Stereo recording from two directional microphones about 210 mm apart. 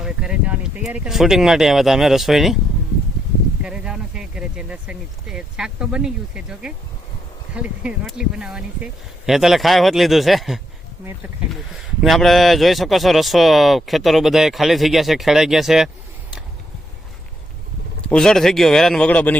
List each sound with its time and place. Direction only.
0.0 s speech: 5° right (ahead or behind)
3.6 s speech: 5° right (ahead or behind)
11.9 s speech: centre (ahead or behind)
18.1 s speech: centre (ahead or behind)